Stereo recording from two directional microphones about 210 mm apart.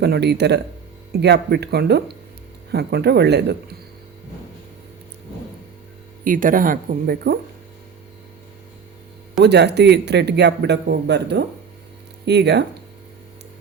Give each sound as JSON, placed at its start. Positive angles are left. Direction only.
{"t": 0.0, "sound": "a man's voice", "side_deg": -50}
{"t": 6.2, "sound": "speech", "side_deg": -40}
{"t": 9.4, "sound": "a man's voice", "side_deg": -55}